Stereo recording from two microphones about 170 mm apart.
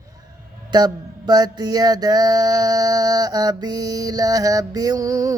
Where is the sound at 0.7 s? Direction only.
25° right (ahead or behind).